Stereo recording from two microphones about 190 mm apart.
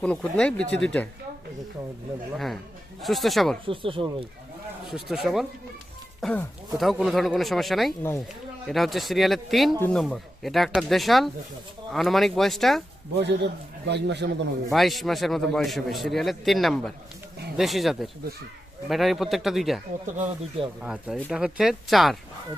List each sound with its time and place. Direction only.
0.0 s a man's voice: 5° left (ahead or behind)
3.0 s a man's voice: centre (ahead or behind)
3.7 s speech: 30° right (ahead or behind)
4.9 s a man's voice: centre (ahead or behind)
6.2 s a man's voice: 10° left (ahead or behind)
13.1 s a man's voice: 65° right (ahead or behind)
14.7 s a man's voice: centre (ahead or behind)
20.1 s speech: 40° right (ahead or behind)
20.8 s a man's voice: 5° right (ahead or behind)